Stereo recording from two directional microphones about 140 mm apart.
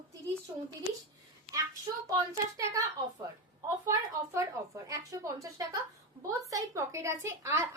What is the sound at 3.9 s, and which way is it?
A woman's voice, 20° right (ahead or behind).